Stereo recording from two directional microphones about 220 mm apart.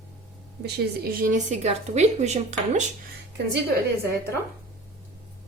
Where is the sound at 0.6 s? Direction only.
45° right (ahead or behind).